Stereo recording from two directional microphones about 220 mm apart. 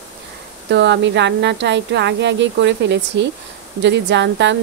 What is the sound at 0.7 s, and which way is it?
Speech, 50° right (ahead or behind).